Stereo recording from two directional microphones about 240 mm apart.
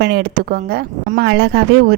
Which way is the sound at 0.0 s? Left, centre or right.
Right.